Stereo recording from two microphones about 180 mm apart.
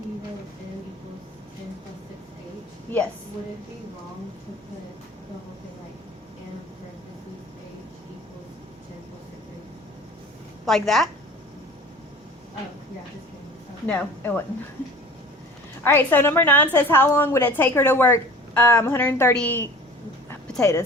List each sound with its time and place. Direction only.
10.7 s a woman's voice: centre (ahead or behind)
13.8 s a woman's voice: 10° left (ahead or behind)
15.8 s a woman's voice: 10° left (ahead or behind)